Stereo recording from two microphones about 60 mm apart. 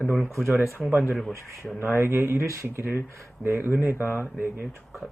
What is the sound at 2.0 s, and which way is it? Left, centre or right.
A man's voice, right.